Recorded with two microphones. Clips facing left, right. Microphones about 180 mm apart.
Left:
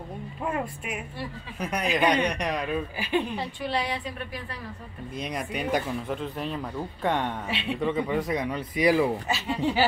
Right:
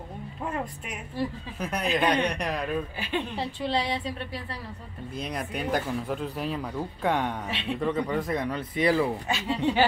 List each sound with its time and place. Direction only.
0.5 s speech: 5° left (ahead or behind)
2.3 s speech: centre (ahead or behind)
3.3 s a woman's voice: 25° right (ahead or behind)
5.3 s speech: 10° left (ahead or behind)